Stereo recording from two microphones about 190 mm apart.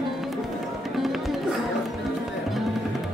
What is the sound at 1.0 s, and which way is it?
Music, centre (ahead or behind).